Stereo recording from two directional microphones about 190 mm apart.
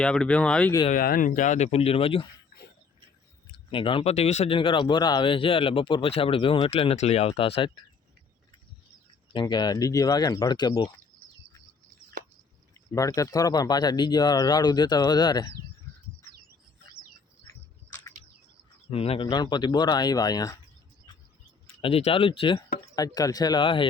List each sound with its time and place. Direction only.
0.0 s speech: 5° left (ahead or behind)
0.9 s speech: 50° left (ahead or behind); by 2.2 s 30° left (ahead or behind)
3.4 s speech: 25° left (ahead or behind)
9.3 s speech: 25° left (ahead or behind)
12.9 s speech: 15° left (ahead or behind)
18.9 s speech: 30° left (ahead or behind)
21.8 s speech: 30° left (ahead or behind)